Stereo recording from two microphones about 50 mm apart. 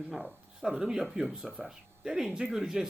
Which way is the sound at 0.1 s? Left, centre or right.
Centre.